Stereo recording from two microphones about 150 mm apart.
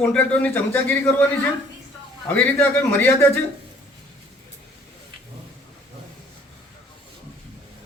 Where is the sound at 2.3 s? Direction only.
10° left (ahead or behind).